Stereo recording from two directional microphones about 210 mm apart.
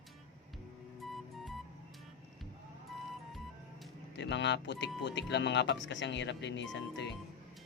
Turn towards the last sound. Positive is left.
turn(degrees=60)  # may be behind; listen again after turning